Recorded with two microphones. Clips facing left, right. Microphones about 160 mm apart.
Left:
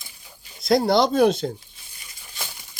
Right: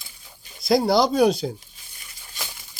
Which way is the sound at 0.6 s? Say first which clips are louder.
Even; centre (ahead or behind).